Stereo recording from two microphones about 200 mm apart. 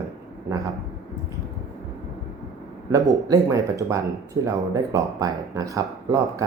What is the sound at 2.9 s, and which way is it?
Speech, 15° right (ahead or behind).